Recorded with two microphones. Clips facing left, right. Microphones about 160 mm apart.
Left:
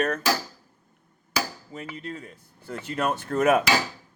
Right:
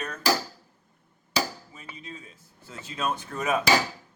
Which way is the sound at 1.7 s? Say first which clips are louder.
Left 7 dB; 65° left (ahead or behind).